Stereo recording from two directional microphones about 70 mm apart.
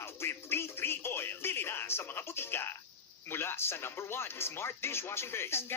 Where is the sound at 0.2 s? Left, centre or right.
Left.